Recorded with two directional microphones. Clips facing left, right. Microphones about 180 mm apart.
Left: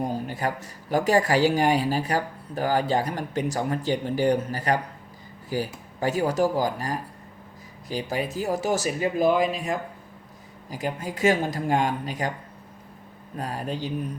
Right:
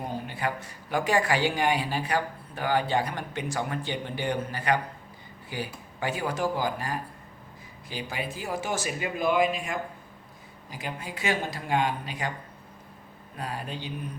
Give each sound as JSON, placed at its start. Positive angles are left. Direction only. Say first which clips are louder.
{"t": 0.0, "sound": "speech", "louder": "left 4 dB", "side_deg": 40}
{"t": 13.3, "sound": "speech", "louder": "left 5 dB", "side_deg": 40}